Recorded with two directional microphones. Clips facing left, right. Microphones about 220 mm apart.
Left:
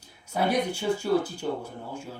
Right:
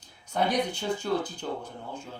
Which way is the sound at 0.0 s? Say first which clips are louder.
Left 1 dB; 10° left (ahead or behind).